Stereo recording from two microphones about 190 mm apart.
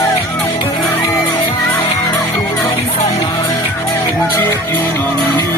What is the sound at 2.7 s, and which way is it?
Music, 30° left (ahead or behind).